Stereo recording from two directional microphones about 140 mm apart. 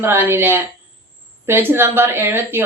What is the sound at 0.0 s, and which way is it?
A woman's voice, 15° right (ahead or behind).